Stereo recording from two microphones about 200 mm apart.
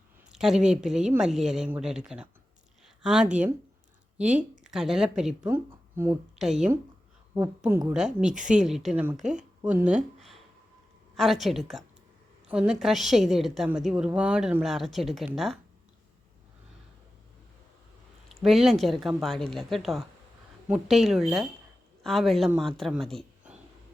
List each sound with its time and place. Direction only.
0.3 s a woman's voice: centre (ahead or behind)
4.3 s speech: 40° right (ahead or behind)
4.6 s a woman's voice: 5° right (ahead or behind)
8.3 s speech: 40° right (ahead or behind)
8.5 s a woman's voice: centre (ahead or behind)
18.3 s a woman's voice: centre (ahead or behind)